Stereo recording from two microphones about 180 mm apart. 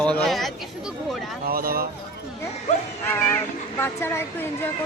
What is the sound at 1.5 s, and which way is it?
Speech, 55° right (ahead or behind).